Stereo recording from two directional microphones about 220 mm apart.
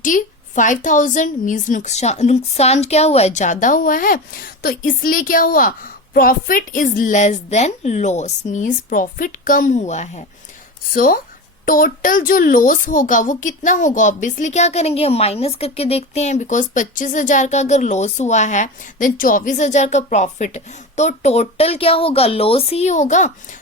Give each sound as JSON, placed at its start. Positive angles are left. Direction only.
{"t": 0.0, "sound": "a child's voice", "side_deg": 35}